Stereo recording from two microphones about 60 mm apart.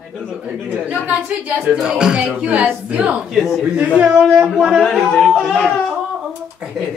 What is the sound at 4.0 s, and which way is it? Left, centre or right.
Speech, centre.